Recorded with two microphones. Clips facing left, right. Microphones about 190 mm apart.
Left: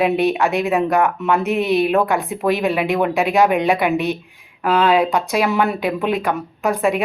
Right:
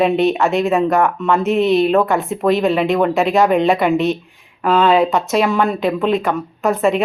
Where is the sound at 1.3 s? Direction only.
15° left (ahead or behind).